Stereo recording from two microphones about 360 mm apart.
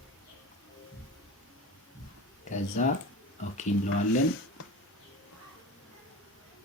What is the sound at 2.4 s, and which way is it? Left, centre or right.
Speech, left.